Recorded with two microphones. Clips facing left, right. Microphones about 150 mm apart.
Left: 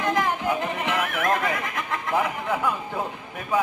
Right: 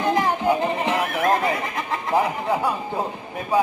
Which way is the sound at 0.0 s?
30° right (ahead or behind).